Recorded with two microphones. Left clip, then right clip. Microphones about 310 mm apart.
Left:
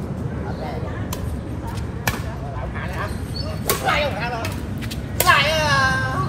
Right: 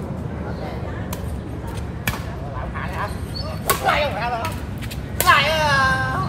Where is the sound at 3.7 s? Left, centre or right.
Centre.